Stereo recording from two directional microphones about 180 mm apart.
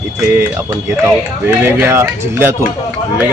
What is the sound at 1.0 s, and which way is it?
A man's voice, 15° right (ahead or behind).